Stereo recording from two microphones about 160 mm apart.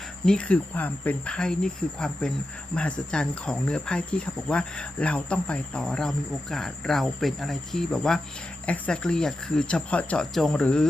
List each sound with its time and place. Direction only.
0.3 s speech: 5° left (ahead or behind)